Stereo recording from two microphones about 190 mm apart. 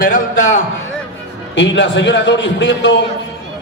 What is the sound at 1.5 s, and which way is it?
A man's voice, 70° left (ahead or behind).